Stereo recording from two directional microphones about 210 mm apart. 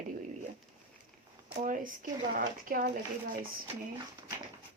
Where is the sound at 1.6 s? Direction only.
40° right (ahead or behind).